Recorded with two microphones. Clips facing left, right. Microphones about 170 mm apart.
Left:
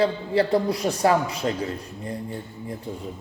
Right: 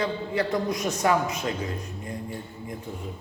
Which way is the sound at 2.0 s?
35° left (ahead or behind).